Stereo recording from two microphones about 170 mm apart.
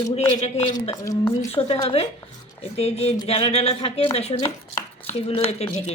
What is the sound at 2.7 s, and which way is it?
Speech, 35° left (ahead or behind).